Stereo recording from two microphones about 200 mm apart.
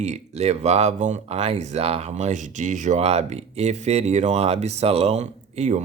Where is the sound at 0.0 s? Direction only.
35° right (ahead or behind).